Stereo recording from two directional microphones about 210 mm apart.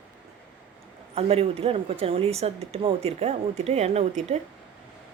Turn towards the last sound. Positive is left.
turn(degrees=-30)  # may be behind; listen again after turning